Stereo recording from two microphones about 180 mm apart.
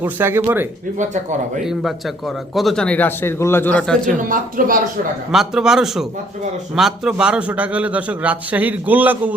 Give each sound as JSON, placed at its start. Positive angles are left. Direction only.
{"t": 0.0, "sound": "a man's voice", "side_deg": -10}
{"t": 0.9, "sound": "speech", "side_deg": -40}
{"t": 1.6, "sound": "a man's voice", "side_deg": 0}
{"t": 4.0, "sound": "speech", "side_deg": -50}
{"t": 5.3, "sound": "a man's voice", "side_deg": 0}